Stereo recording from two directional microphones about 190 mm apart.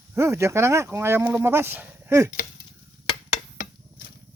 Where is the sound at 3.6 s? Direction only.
55° left (ahead or behind).